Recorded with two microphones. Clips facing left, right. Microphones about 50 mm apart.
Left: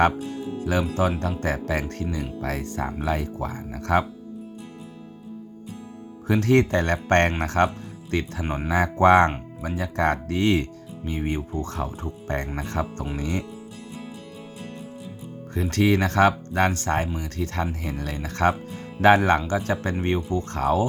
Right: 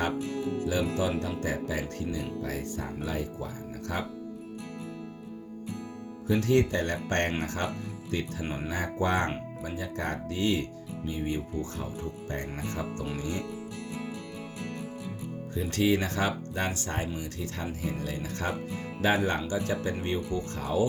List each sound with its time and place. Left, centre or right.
0.7 s speech: left
2.4 s speech: left
6.2 s speech: left
8.4 s speech: left
8.7 s speech: left
15.5 s speech: left